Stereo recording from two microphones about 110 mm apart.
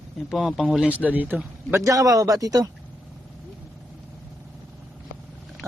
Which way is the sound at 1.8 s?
30° right (ahead or behind).